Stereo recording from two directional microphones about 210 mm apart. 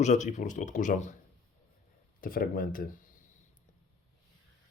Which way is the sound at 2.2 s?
45° left (ahead or behind).